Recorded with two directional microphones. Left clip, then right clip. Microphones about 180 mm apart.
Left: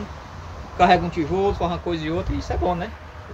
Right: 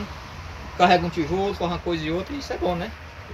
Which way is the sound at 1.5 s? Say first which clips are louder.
Left 2 dB; 15° left (ahead or behind).